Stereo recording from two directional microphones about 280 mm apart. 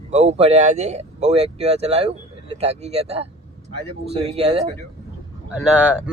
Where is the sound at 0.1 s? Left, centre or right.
Right.